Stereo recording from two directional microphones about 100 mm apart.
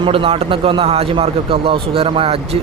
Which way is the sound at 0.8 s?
80° right.